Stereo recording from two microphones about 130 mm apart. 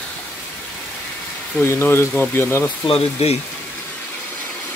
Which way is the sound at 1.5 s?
15° left (ahead or behind).